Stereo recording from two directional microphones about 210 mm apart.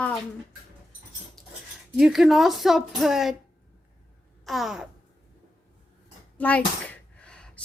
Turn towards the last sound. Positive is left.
turn(degrees=5)  # may be behind; listen again after turning